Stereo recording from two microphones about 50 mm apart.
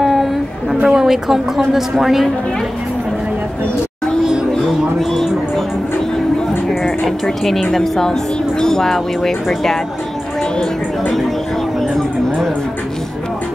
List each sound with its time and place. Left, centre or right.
0.0 s a sound: centre
0.8 s a woman's voice: centre
7.2 s speech: centre